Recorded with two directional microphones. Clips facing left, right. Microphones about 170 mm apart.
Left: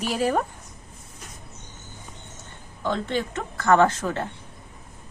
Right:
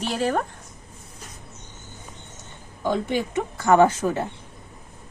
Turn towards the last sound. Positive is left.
turn(degrees=-10)  # may be behind; listen again after turning